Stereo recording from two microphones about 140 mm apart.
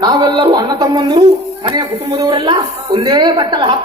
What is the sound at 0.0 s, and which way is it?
A woman's voice, 30° right (ahead or behind).